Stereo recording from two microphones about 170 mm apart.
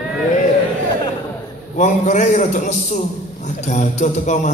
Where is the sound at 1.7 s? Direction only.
45° left (ahead or behind).